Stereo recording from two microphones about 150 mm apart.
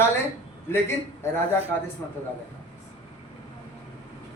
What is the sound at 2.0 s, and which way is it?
Speech, 15° left (ahead or behind).